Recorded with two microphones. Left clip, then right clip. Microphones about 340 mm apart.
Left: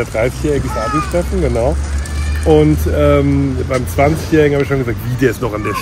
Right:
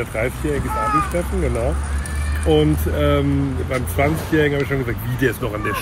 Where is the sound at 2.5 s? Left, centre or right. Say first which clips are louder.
Left 6 dB; centre.